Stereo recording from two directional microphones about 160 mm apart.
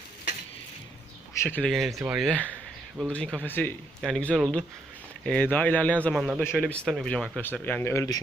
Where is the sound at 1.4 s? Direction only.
5° left (ahead or behind).